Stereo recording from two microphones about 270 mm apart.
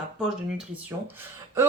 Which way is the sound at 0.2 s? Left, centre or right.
Centre.